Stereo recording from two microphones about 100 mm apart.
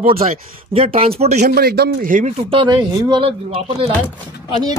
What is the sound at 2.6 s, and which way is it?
Speech, 50° right (ahead or behind).